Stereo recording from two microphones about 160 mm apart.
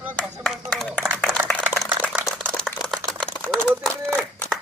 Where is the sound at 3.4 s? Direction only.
5° left (ahead or behind).